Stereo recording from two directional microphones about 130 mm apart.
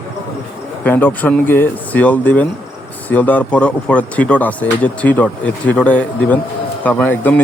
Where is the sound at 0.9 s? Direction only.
15° left (ahead or behind).